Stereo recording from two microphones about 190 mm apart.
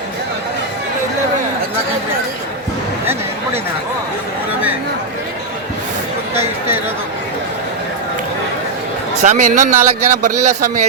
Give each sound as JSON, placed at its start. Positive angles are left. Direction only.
{"t": 9.2, "sound": "speech", "side_deg": -40}